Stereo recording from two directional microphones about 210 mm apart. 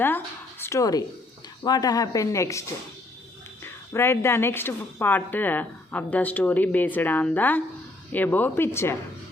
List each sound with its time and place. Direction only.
0.6 s a woman's voice: 15° left (ahead or behind)